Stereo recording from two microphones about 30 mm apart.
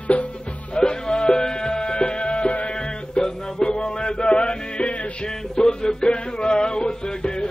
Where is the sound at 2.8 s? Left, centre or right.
Left.